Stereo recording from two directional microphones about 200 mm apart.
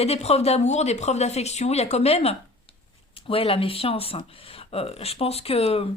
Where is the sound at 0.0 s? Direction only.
30° left (ahead or behind).